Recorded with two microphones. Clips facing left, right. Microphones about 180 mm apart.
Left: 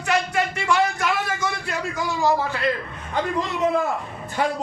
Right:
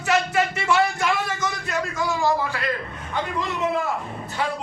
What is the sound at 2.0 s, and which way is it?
Speech, 20° left (ahead or behind).